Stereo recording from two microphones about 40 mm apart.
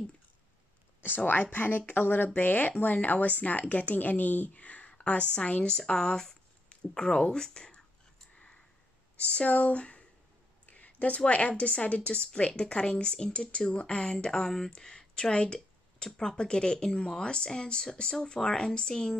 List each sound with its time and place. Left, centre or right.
1.0 s speech: left; by 7.8 s centre
9.2 s speech: left
10.7 s a sound: left
11.2 s speech: left
14.1 s a sound: centre
14.7 s speech: centre